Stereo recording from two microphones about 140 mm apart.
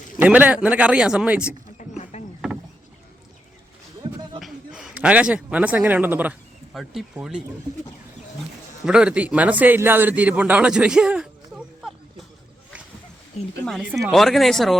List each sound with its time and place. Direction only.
0.2 s speech: 10° right (ahead or behind)
1.8 s a sound: 55° left (ahead or behind)
4.0 s a sound: 35° right (ahead or behind)
4.4 s a man's voice: centre (ahead or behind)
8.8 s a man's voice: 5° right (ahead or behind)
13.7 s speech: centre (ahead or behind)